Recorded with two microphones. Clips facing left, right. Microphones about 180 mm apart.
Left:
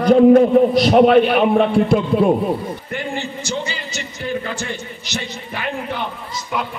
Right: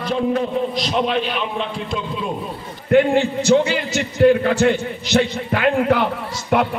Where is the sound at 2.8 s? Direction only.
60° right (ahead or behind); by 6.0 s 80° right.